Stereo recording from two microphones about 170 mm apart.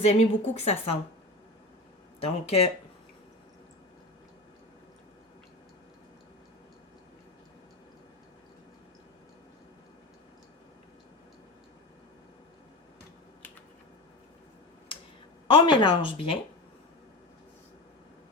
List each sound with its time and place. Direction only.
0.0 s speech: 40° left (ahead or behind)
2.2 s speech: 35° left (ahead or behind)
15.4 s speech: 30° left (ahead or behind)